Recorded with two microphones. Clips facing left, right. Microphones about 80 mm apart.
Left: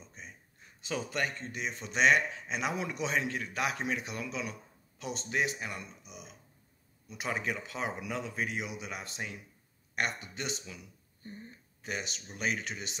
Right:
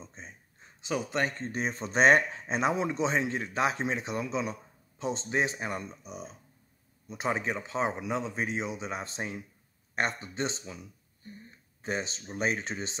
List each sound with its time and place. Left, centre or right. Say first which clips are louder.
0.0 s a man's voice: right 3 dB; right